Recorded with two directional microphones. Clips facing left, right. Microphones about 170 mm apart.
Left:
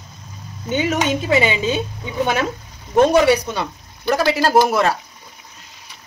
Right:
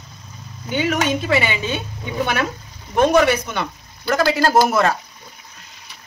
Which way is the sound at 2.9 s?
15° left (ahead or behind).